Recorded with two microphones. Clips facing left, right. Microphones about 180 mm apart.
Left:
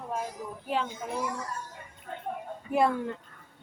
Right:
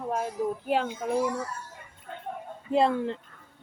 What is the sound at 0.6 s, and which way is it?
Speech, 55° right (ahead or behind).